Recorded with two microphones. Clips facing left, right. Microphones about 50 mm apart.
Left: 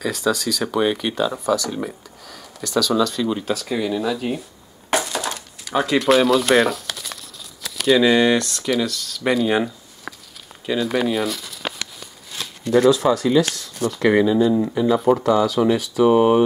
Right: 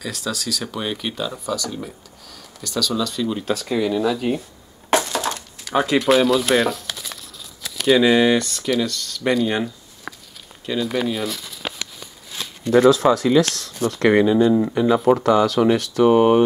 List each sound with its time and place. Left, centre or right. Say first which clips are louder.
0.0 s speech: left 6 dB; centre
4.9 s a sound: right 2 dB; centre
7.6 s speech: even; centre
10.7 s a sound: left 2 dB; centre
12.9 s speech: right 1 dB; centre
14.1 s speech: right 1 dB; centre